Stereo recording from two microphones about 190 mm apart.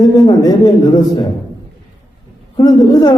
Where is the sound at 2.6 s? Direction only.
20° left (ahead or behind).